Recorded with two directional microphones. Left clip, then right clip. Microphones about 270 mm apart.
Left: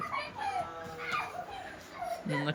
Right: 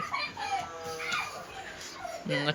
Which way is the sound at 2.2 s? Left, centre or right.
Centre.